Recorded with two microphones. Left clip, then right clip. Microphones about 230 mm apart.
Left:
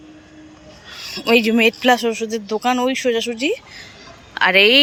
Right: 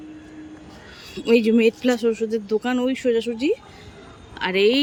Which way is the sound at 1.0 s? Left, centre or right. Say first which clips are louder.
Left 3 dB; centre.